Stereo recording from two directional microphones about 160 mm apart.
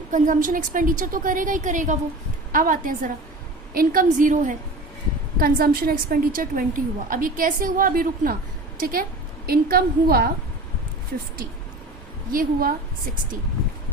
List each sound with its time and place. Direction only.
0.1 s a woman's voice: 55° right (ahead or behind)
5.4 s a woman's voice: 65° right (ahead or behind)
12.3 s a woman's voice: 65° right (ahead or behind)